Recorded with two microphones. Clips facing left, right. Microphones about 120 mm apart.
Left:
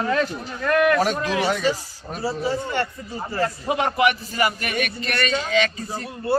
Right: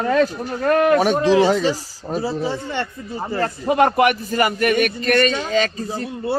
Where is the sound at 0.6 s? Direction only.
35° right (ahead or behind).